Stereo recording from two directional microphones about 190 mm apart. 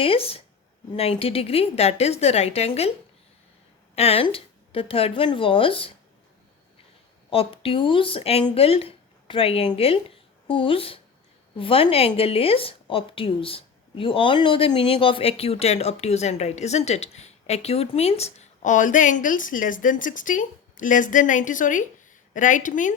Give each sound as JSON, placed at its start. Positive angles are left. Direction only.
{"t": 0.0, "sound": "a woman's voice", "side_deg": 30}
{"t": 3.9, "sound": "speech", "side_deg": 30}
{"t": 7.3, "sound": "a woman's voice", "side_deg": 30}